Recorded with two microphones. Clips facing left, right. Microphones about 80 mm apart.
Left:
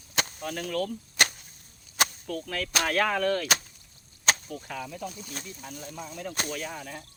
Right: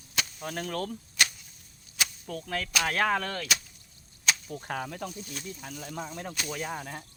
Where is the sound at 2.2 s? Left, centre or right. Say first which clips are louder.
Left 1 dB; centre.